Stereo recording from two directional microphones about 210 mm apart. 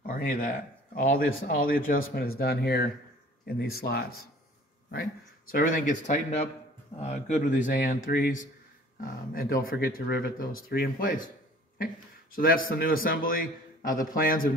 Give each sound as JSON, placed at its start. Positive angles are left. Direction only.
{"t": 0.0, "sound": "a sound", "side_deg": 40}
{"t": 0.9, "sound": "a man's voice", "side_deg": 40}
{"t": 5.5, "sound": "a man's voice", "side_deg": 40}